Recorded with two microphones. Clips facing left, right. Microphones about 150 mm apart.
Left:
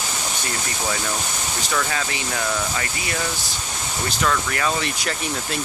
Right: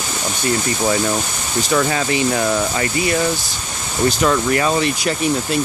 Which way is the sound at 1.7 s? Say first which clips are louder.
Right 8 dB; 30° right (ahead or behind).